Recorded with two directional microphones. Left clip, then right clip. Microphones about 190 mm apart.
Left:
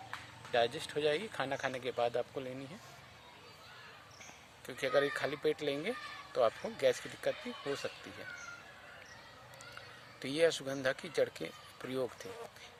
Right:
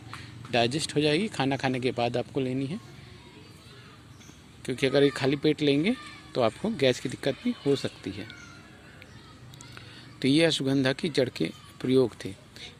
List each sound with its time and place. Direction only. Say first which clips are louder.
0.5 s speech: right 7 dB; 40° right (ahead or behind)
4.6 s speech: right 9 dB; 40° right (ahead or behind)
10.2 s speech: right 8 dB; 40° right (ahead or behind)